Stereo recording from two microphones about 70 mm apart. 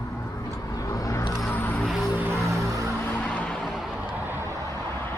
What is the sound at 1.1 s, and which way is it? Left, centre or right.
Vehicle, left.